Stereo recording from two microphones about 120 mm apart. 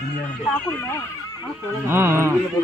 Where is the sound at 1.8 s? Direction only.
20° right (ahead or behind).